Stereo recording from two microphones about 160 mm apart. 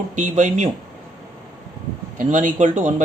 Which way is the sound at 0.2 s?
50° right (ahead or behind).